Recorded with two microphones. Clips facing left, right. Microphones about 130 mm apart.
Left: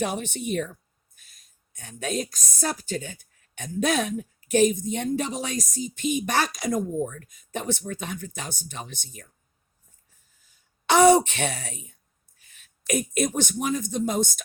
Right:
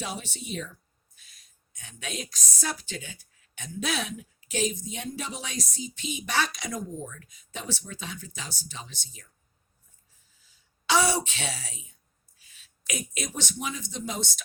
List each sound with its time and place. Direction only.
0.0 s speech: 55° left (ahead or behind)
10.4 s a sound: 55° left (ahead or behind)
12.4 s speech: 55° left (ahead or behind)